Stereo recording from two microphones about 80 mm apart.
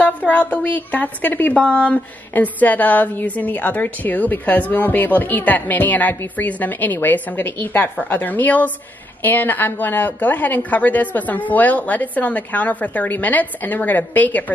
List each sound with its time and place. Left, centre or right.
0.3 s a woman's voice: left